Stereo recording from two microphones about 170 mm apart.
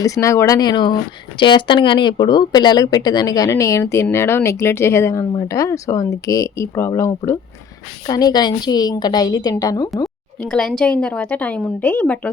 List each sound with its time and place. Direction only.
0.0 s speech: 20° left (ahead or behind)
10.5 s a woman's voice: 5° left (ahead or behind)